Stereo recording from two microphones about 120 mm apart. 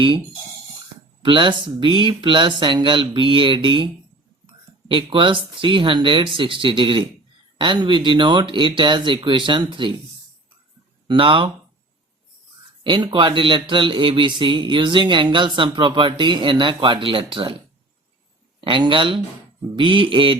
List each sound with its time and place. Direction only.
1.2 s speech: 40° right (ahead or behind)
4.9 s speech: 45° right (ahead or behind)
11.1 s speech: 45° right (ahead or behind)
12.8 s speech: 40° right (ahead or behind)
18.6 s speech: 45° right (ahead or behind)